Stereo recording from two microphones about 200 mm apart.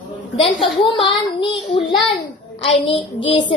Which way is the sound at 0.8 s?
25° left (ahead or behind).